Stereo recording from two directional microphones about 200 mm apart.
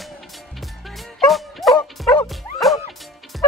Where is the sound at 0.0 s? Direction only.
Centre (ahead or behind).